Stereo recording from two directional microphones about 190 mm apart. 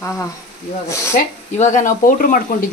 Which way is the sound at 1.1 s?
40° left (ahead or behind).